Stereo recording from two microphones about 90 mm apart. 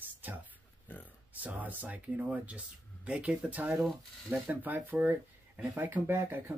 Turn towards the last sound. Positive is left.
turn(degrees=-25)  # may be behind; listen again after turning